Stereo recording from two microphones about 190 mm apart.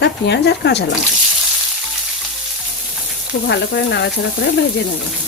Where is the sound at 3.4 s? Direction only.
65° left (ahead or behind).